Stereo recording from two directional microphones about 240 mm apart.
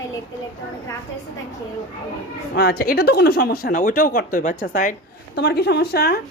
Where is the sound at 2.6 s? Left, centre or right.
Left.